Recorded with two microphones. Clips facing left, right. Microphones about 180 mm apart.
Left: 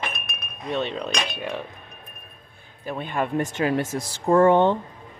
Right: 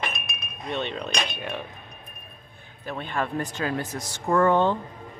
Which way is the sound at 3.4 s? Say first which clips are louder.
Left 5 dB; 25° left (ahead or behind).